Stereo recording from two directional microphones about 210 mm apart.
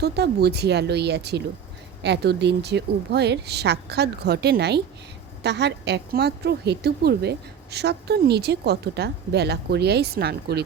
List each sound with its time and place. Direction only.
0.0 s a woman's voice: 50° right (ahead or behind)